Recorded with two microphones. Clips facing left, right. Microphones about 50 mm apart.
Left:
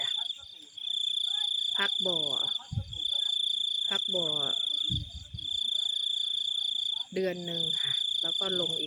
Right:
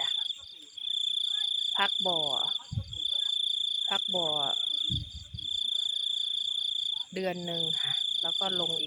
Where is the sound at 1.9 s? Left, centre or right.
Centre.